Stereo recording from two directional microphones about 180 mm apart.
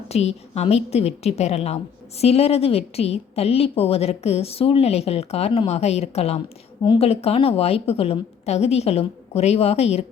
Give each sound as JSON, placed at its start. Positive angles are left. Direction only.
{"t": 0.1, "sound": "a woman's voice", "side_deg": 35}